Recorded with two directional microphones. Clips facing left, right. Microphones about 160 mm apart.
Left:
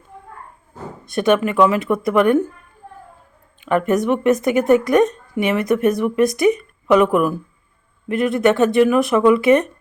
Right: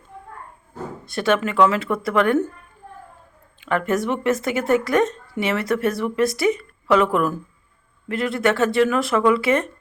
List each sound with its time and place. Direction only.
1.0 s a woman's voice: 20° left (ahead or behind)
3.6 s a woman's voice: 15° left (ahead or behind)